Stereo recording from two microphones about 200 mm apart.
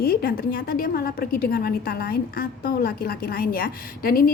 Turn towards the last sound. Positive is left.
turn(degrees=50)  # may be behind; listen again after turning